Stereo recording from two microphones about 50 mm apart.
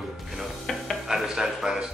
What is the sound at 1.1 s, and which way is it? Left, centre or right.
Speech, centre.